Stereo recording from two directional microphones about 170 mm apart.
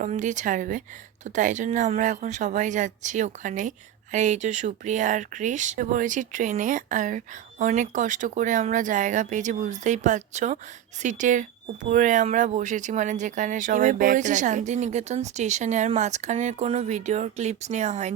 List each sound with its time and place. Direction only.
0.0 s speech: 45° right (ahead or behind)